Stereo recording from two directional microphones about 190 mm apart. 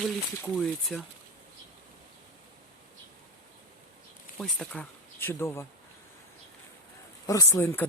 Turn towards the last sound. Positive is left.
turn(degrees=10)  # may be behind; listen again after turning